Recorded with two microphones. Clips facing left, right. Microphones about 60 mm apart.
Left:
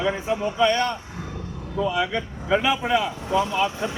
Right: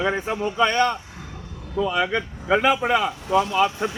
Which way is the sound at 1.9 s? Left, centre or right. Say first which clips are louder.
Right 1 dB; right.